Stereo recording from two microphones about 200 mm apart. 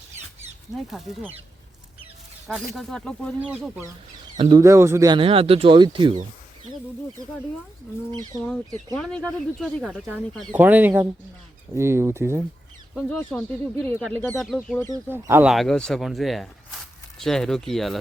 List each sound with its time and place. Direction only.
0.9 s speech: centre (ahead or behind)
2.5 s speech: centre (ahead or behind)
4.4 s speech: 25° right (ahead or behind)
4.6 s speech: 15° right (ahead or behind)
8.3 s speech: 20° left (ahead or behind)
9.0 s speech: 5° left (ahead or behind); by 12.4 s 15° right (ahead or behind)
12.9 s speech: centre (ahead or behind)
14.8 s speech: 15° right (ahead or behind); by 17.9 s centre (ahead or behind)